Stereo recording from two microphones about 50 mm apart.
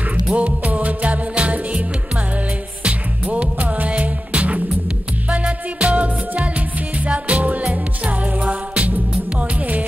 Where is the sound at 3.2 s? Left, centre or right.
Right.